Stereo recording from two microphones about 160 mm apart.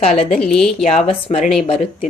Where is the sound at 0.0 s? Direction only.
40° left (ahead or behind).